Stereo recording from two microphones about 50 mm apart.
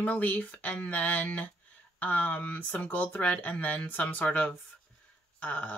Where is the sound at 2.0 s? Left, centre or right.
Left.